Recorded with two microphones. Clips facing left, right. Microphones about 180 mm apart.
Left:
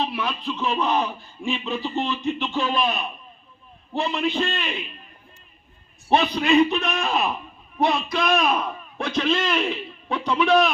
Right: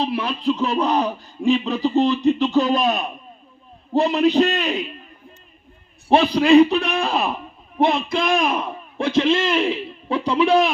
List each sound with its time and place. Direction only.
0.0 s speech: 35° right (ahead or behind)
6.1 s a man's voice: 30° right (ahead or behind)